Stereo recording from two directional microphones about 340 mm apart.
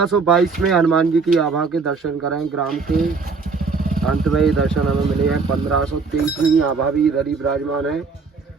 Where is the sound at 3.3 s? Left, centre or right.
Right.